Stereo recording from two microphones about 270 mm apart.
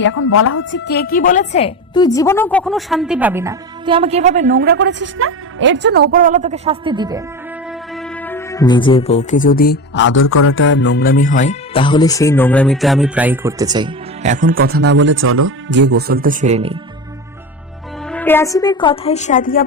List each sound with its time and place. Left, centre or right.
0.0 s a woman's voice: left; by 7.2 s centre
7.9 s speech: centre; by 16.7 s right
18.1 s speech: centre; by 19.6 s left